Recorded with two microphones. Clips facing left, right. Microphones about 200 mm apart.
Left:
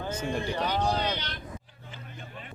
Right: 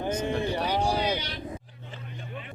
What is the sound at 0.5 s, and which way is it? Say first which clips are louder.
Speech: right 1 dB; 10° right (ahead or behind).